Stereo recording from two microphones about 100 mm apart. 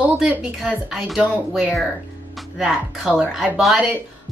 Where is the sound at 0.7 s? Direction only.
Centre (ahead or behind).